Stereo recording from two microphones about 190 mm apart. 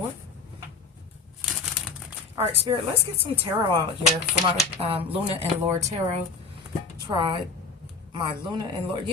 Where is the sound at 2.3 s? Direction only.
30° right (ahead or behind).